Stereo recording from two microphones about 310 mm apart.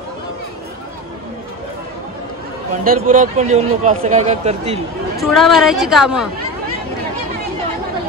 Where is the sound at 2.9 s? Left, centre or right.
Right.